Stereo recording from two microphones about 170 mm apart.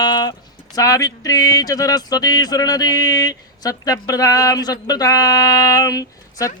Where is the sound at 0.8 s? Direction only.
20° left (ahead or behind).